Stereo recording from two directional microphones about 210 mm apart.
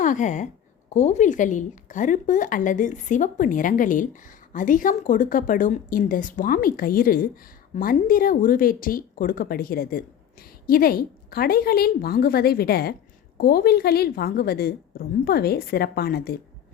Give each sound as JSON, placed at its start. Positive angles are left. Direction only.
{"t": 0.0, "sound": "a woman's voice", "side_deg": 35}